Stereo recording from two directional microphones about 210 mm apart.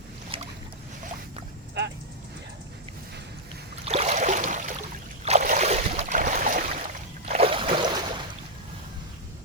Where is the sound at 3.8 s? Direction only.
30° right (ahead or behind).